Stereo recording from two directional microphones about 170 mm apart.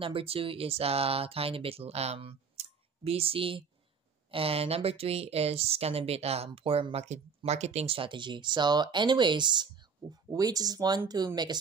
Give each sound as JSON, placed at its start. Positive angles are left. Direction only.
{"t": 0.0, "sound": "speech", "side_deg": -35}